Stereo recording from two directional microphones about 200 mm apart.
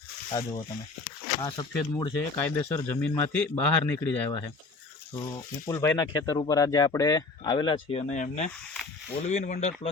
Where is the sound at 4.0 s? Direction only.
20° left (ahead or behind).